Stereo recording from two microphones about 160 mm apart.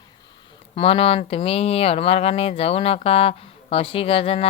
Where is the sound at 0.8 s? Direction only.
35° left (ahead or behind).